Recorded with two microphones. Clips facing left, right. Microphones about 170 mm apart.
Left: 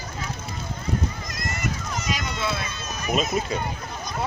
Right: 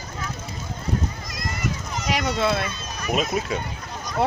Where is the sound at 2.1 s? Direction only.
65° right (ahead or behind).